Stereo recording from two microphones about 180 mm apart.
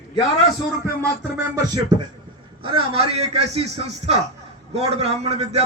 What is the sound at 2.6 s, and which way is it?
A man's voice, 30° right (ahead or behind).